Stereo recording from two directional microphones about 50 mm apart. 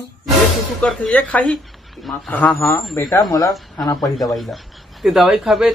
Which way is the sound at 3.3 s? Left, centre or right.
Left.